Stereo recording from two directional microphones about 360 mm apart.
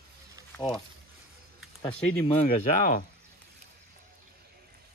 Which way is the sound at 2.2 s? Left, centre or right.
Centre.